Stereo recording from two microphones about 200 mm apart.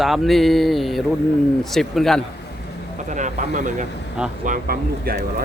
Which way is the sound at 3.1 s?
40° right (ahead or behind).